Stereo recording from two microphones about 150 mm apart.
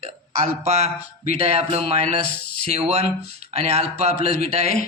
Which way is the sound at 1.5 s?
45° right (ahead or behind).